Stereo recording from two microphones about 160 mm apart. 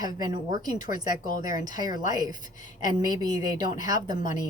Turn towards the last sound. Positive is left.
turn(degrees=-25)  # may be behind; listen again after turning